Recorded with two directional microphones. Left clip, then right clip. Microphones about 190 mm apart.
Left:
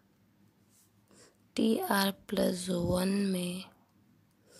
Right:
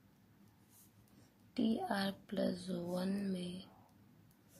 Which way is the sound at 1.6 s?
45° left (ahead or behind).